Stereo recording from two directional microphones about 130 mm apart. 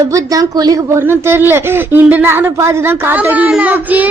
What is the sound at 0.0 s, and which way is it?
Speech, 25° right (ahead or behind).